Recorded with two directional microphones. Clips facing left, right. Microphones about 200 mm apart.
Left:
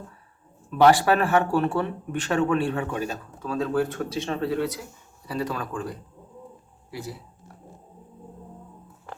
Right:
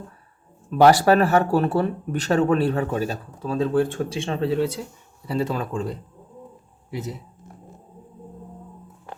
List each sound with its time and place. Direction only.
0.8 s speech: 40° right (ahead or behind); by 7.5 s 20° right (ahead or behind)